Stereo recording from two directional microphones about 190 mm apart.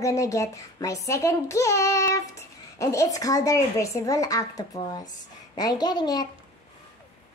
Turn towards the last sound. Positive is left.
turn(degrees=20)  # may be behind; listen again after turning